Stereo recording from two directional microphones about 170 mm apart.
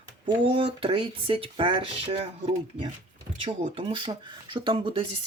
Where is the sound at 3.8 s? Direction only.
30° right (ahead or behind).